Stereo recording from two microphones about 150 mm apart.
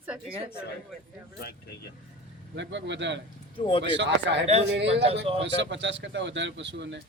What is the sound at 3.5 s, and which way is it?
Speech, 35° left (ahead or behind).